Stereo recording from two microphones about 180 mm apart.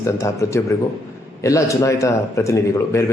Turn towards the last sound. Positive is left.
turn(degrees=15)  # may be behind; listen again after turning